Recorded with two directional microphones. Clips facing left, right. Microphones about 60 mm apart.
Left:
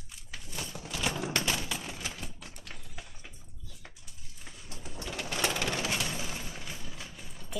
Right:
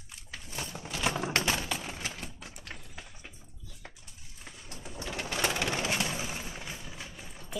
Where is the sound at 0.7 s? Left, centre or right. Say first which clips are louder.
Right 2 dB; right.